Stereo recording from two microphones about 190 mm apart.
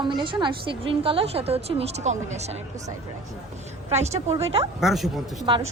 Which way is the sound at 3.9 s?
35° right (ahead or behind).